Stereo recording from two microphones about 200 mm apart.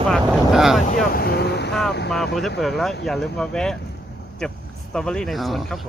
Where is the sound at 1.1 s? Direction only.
50° left (ahead or behind).